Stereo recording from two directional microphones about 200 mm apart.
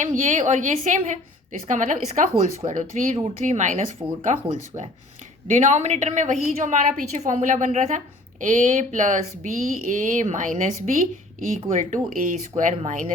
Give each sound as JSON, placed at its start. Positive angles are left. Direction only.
{"t": 0.0, "sound": "a woman's voice", "side_deg": -35}
{"t": 11.8, "sound": "a woman's voice", "side_deg": -40}